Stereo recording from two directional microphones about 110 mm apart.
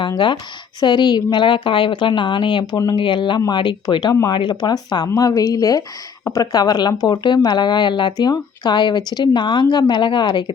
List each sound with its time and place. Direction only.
0.8 s a woman's voice: 40° left (ahead or behind)